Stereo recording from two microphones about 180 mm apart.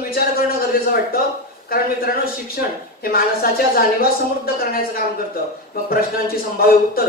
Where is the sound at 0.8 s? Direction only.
55° left (ahead or behind).